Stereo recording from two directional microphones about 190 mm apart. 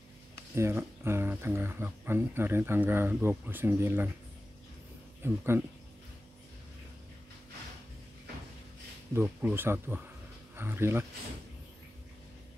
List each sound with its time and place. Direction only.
0.6 s speech: 15° right (ahead or behind)
5.2 s speech: 10° right (ahead or behind)
9.1 s speech: 10° right (ahead or behind)